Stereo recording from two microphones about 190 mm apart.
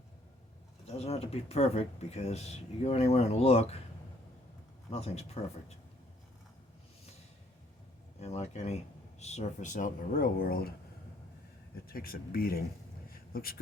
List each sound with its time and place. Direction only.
0.9 s speech: 35° left (ahead or behind)
4.9 s speech: 35° left (ahead or behind)
8.2 s speech: 35° left (ahead or behind); by 10.7 s 50° left (ahead or behind)
11.9 s speech: 50° left (ahead or behind)
13.1 s a sound: 50° left (ahead or behind)